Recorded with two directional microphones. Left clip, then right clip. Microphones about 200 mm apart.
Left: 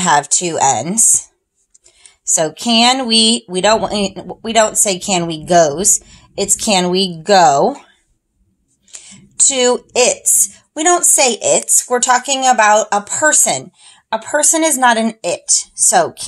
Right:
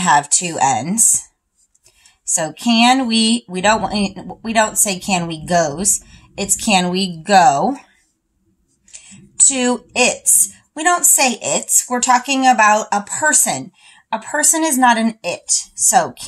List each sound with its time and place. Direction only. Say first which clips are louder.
0.0 s a woman's voice: left 1 dB; 35° left (ahead or behind)
2.2 s a woman's voice: left 3 dB; 35° left (ahead or behind)
9.1 s a woman's voice: left 2 dB; 35° left (ahead or behind)